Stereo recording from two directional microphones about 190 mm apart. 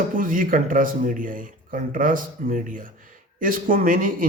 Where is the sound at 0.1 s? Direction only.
45° right (ahead or behind).